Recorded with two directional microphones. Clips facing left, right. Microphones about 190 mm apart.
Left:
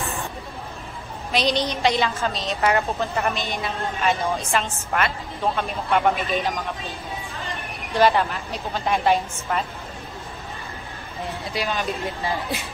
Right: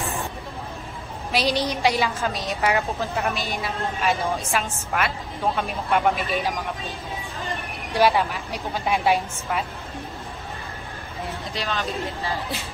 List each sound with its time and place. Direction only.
1.3 s a woman's voice: 10° right (ahead or behind)
2.6 s a woman's voice: centre (ahead or behind)
7.9 s a woman's voice: 5° right (ahead or behind)
11.5 s speech: 15° left (ahead or behind)